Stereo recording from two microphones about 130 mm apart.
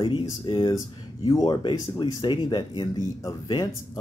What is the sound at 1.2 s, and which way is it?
Speech, 30° left (ahead or behind).